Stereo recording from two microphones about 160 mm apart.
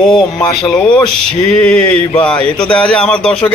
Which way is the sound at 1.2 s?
5° left (ahead or behind).